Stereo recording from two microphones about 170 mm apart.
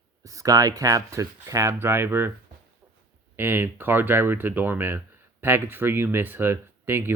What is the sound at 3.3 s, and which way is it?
Speech, 15° right (ahead or behind).